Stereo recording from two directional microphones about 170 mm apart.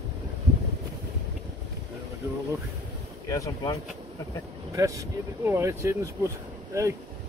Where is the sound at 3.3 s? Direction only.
20° left (ahead or behind).